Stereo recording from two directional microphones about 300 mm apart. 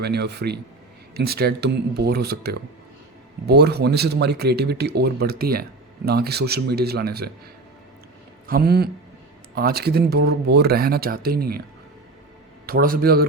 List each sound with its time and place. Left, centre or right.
0.0 s speech: right
8.4 s speech: right
12.6 s a man's voice: right